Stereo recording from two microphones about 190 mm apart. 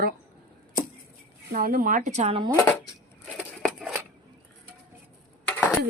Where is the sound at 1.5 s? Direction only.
50° right (ahead or behind); by 2.5 s 30° right (ahead or behind).